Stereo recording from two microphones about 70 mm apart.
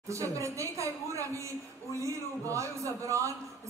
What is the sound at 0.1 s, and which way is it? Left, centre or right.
A man's voice, right.